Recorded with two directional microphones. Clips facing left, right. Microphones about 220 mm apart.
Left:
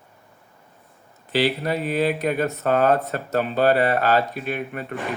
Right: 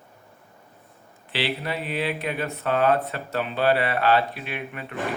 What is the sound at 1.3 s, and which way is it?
Speech, 45° left (ahead or behind).